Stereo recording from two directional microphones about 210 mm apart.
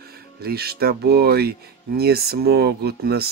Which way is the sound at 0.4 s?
50° right (ahead or behind).